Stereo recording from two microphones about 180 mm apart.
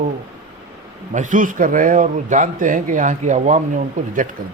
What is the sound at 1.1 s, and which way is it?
Speech, 45° right (ahead or behind).